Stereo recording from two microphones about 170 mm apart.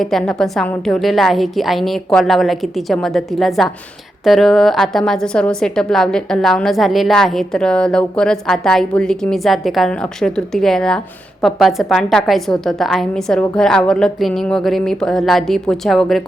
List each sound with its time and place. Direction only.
0.0 s a woman's voice: 5° left (ahead or behind)